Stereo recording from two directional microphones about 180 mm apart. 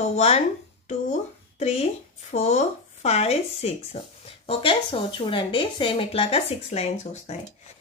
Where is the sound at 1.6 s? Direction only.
35° left (ahead or behind).